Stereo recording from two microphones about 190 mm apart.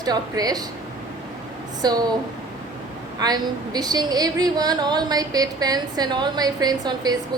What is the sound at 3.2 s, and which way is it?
A woman's voice, 20° right (ahead or behind).